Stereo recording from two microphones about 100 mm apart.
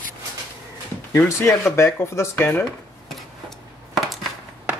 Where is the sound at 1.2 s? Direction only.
25° left (ahead or behind).